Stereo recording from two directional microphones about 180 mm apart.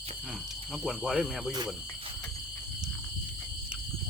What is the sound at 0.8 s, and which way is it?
Speech, centre (ahead or behind).